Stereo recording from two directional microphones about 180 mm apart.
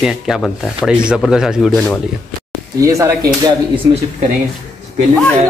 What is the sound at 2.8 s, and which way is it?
Speech, 20° right (ahead or behind).